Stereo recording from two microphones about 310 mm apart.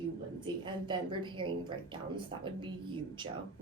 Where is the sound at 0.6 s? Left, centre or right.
Centre.